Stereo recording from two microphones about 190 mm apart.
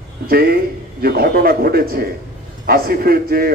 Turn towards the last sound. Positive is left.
turn(degrees=-50)  # may be behind; listen again after turning